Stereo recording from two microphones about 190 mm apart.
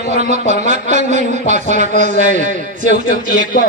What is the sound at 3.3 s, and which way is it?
Speech, 45° left (ahead or behind).